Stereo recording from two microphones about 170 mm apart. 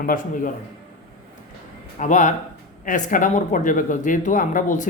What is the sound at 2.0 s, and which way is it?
Speech, 45° left (ahead or behind).